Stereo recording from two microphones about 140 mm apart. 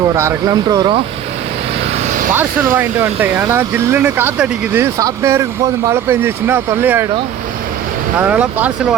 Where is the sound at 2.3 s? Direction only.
15° right (ahead or behind).